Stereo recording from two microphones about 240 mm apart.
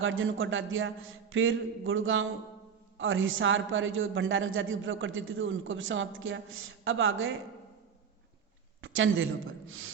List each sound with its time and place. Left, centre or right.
0.0 s a man's voice: right
8.8 s a woman's voice: right
9.6 s a sound: right